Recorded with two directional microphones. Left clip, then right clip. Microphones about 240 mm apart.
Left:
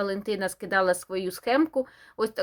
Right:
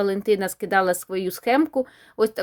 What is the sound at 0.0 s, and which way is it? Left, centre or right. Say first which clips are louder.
Speech: right 7 dB; right.